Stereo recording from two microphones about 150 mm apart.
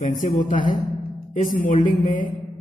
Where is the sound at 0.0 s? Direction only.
65° left (ahead or behind).